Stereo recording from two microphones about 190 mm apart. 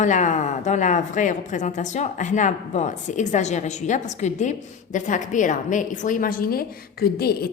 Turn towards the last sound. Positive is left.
turn(degrees=55)  # may be behind; listen again after turning